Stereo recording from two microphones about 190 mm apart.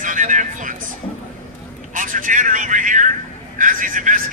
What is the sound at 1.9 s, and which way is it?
Speech, 45° right (ahead or behind).